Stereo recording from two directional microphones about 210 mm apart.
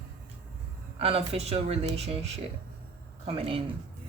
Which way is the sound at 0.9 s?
30° right (ahead or behind).